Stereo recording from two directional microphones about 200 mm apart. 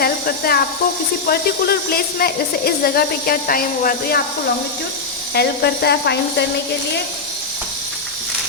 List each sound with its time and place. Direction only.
0.0 s electric toothbrush: 50° left (ahead or behind)
1.3 s a woman's voice: 50° left (ahead or behind)
5.3 s speech: 55° left (ahead or behind)